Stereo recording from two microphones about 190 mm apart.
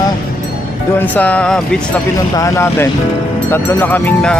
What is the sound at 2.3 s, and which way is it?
Speech, 15° left (ahead or behind).